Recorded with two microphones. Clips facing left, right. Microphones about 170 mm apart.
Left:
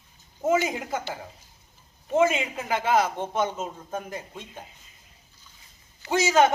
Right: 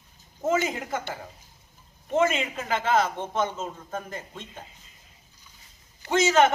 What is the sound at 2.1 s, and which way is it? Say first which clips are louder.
A man's voice: left 2 dB; 15° left (ahead or behind).